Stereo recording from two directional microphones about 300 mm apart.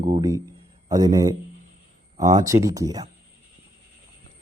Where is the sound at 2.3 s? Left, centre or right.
Centre.